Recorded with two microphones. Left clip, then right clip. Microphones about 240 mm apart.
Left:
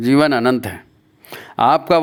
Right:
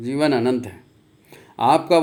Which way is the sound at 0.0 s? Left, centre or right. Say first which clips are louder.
Left 6 dB; left.